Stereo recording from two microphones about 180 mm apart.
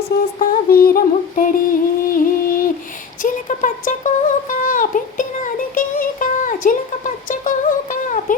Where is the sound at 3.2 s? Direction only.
45° left (ahead or behind).